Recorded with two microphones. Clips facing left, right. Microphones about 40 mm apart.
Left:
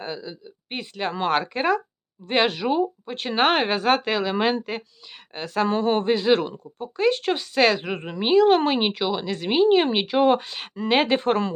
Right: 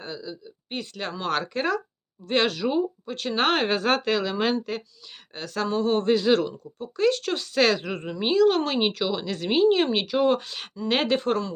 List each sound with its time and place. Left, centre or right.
0.0 s speech: left
6.4 s speech: left
6.9 s speech: centre
7.3 s speech: centre
7.8 s speech: left
9.2 s speech: centre; by 10.5 s left
10.8 s speech: centre
11.2 s speech: left